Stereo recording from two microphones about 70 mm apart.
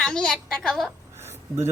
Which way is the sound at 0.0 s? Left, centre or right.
Centre.